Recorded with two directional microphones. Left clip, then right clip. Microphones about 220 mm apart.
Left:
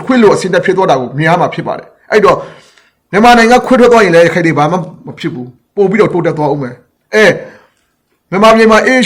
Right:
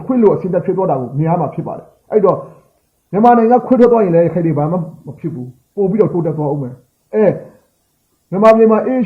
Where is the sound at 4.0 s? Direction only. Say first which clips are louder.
Left 6 dB; 15° left (ahead or behind).